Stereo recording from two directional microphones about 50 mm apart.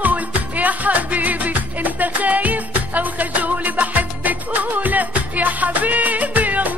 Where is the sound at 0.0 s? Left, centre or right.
Right.